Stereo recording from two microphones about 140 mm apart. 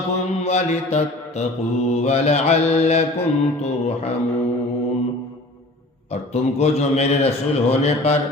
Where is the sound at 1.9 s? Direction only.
50° left (ahead or behind).